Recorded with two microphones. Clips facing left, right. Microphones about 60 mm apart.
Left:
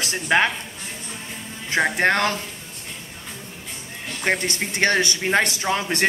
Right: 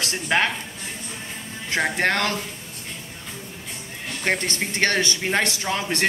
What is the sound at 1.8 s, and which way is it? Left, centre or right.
Speech, centre.